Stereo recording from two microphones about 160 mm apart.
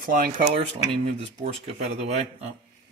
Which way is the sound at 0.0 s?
60° right (ahead or behind).